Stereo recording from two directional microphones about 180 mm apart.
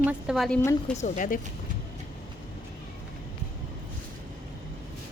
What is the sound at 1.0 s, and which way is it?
Speech, 50° left (ahead or behind).